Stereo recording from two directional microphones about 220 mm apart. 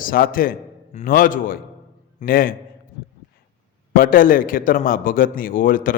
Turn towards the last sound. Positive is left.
turn(degrees=40)  # may be behind; listen again after turning